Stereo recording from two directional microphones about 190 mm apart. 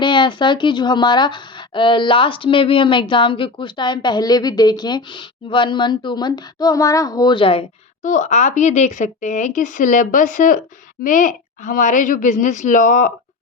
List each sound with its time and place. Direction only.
0.0 s speech: 25° left (ahead or behind)
8.0 s speech: 40° left (ahead or behind)